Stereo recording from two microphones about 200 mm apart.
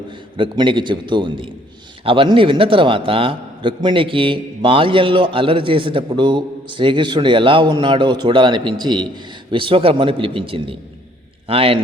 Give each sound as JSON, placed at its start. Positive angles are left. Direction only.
{"t": 0.3, "sound": "a man's voice", "side_deg": -25}